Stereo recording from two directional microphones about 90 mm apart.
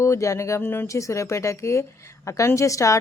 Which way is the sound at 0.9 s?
35° left (ahead or behind).